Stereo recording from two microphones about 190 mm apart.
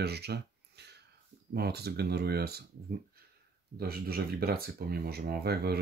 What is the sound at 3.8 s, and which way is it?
Speech, 50° right (ahead or behind).